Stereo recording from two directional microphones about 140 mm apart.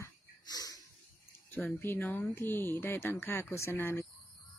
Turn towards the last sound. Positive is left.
turn(degrees=15)  # may be behind; listen again after turning